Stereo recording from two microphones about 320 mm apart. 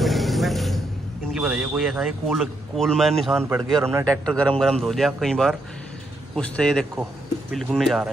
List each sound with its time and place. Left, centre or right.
0.0 s vehicle: centre
1.3 s a man's voice: centre